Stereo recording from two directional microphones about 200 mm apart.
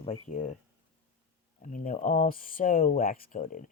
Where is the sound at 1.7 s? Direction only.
40° left (ahead or behind).